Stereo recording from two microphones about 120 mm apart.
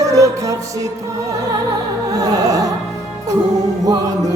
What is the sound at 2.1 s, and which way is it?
Music, 30° right (ahead or behind).